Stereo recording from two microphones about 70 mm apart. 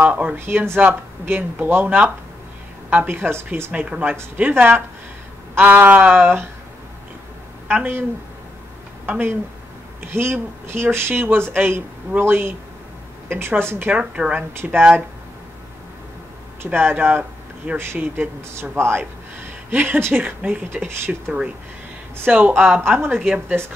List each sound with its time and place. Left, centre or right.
0.0 s speech: centre
0.5 s speech: right
2.9 s a sound: right
3.7 s a sound: centre
7.6 s speech: right
9.0 s speech: right
13.9 s speech: centre
14.6 s speech: right
16.6 s speech: right
22.2 s a sound: right
22.8 s speech: right